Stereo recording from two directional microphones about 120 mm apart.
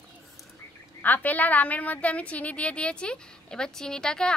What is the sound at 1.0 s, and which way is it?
A woman's voice, 15° left (ahead or behind).